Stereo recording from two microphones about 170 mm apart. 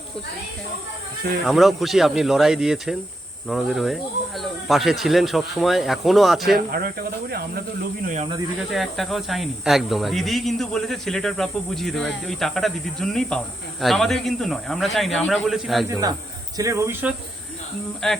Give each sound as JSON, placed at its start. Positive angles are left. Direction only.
{"t": 1.5, "sound": "speech", "side_deg": 0}
{"t": 6.7, "sound": "speech", "side_deg": -65}
{"t": 8.0, "sound": "speech", "side_deg": -45}
{"t": 8.7, "sound": "speech", "side_deg": 0}
{"t": 15.9, "sound": "speech", "side_deg": -20}
{"t": 18.0, "sound": "speech", "side_deg": 5}